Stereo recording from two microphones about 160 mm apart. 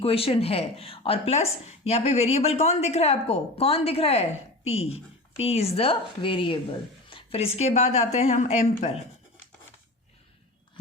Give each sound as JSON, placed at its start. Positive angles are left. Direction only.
{"t": 0.0, "sound": "a woman's voice", "side_deg": 35}